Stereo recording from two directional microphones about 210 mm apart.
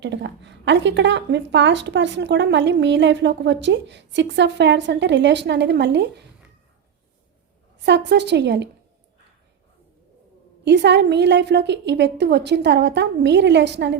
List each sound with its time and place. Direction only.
0.0 s a woman's voice: 55° right (ahead or behind)
7.9 s a woman's voice: 55° right (ahead or behind)
10.7 s a woman's voice: 55° right (ahead or behind)